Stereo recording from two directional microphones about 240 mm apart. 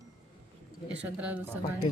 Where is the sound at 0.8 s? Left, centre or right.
Centre.